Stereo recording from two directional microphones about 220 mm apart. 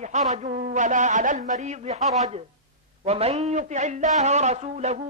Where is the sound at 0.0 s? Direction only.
30° right (ahead or behind).